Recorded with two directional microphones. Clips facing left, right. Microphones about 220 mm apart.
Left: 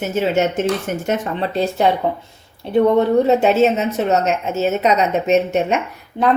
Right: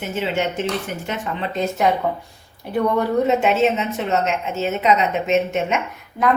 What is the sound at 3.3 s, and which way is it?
A woman's voice, 35° left (ahead or behind).